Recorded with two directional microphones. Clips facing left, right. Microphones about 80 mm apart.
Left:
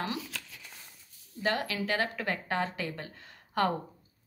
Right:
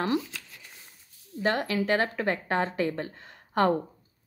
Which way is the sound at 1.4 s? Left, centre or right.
Right.